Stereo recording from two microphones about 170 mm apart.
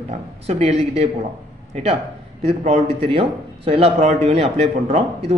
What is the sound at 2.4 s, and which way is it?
Speech, 40° right (ahead or behind).